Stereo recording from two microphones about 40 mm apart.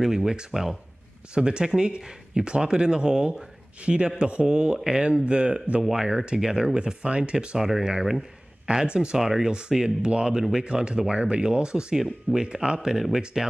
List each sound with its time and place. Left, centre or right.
0.0 s speech: centre
1.3 s speech: right
7.0 s speech: right
7.5 s speech: centre
7.8 s speech: centre
12.6 s speech: centre
13.4 s speech: centre